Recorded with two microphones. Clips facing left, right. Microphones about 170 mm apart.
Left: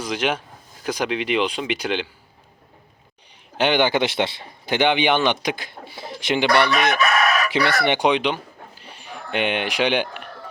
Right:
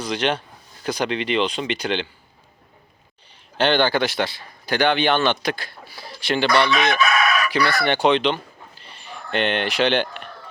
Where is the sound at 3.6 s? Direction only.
15° left (ahead or behind).